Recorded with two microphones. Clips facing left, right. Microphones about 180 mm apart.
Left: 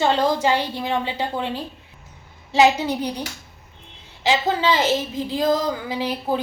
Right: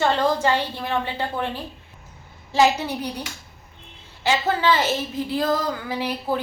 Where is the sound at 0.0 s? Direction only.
10° left (ahead or behind).